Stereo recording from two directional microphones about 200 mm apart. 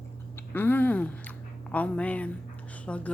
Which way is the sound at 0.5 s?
10° left (ahead or behind).